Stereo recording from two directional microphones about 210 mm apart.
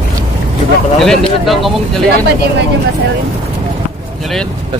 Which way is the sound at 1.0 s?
Centre (ahead or behind).